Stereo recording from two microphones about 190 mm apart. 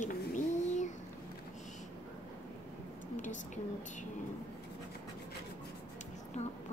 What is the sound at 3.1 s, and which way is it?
Speech, 40° left (ahead or behind).